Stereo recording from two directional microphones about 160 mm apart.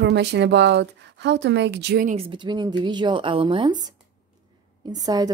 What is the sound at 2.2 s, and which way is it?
A woman's voice, 30° right (ahead or behind).